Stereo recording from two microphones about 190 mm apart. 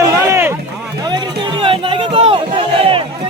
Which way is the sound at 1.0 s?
25° right (ahead or behind).